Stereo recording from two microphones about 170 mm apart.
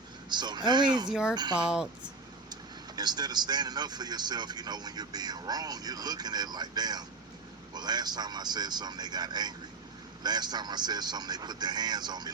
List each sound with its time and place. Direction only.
0.3 s speech: 25° right (ahead or behind)
1.5 s speech: 5° right (ahead or behind)
2.5 s speech: 25° right (ahead or behind)